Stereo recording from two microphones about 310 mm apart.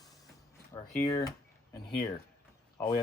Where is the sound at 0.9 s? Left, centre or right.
Centre.